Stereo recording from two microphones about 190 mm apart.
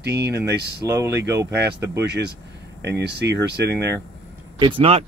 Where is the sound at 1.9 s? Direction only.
65° right (ahead or behind).